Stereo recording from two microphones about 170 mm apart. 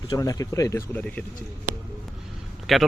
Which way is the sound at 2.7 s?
Centre (ahead or behind).